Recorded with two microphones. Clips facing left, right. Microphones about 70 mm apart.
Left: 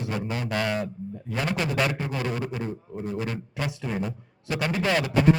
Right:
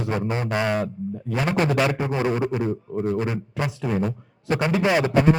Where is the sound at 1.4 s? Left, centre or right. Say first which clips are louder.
Right 6 dB; right.